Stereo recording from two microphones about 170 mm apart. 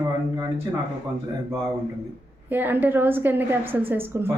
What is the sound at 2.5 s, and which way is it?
Speech, 10° right (ahead or behind).